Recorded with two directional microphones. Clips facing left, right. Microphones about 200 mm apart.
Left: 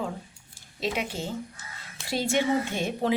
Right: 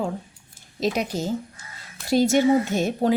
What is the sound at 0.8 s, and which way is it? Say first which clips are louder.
Speech: right 6 dB; 40° right (ahead or behind).